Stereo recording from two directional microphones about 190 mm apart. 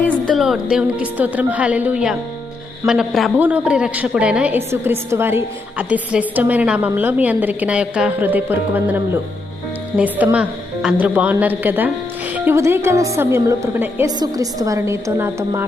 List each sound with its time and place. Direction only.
0.3 s a woman's voice: centre (ahead or behind)